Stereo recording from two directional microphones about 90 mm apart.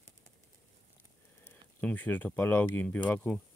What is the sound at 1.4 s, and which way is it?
Speech, 20° left (ahead or behind).